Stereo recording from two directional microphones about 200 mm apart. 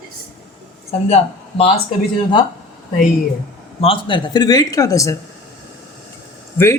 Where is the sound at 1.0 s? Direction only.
30° left (ahead or behind).